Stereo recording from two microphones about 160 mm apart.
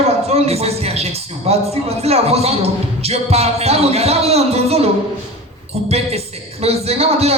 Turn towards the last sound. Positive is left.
turn(degrees=-40)  # may be behind; listen again after turning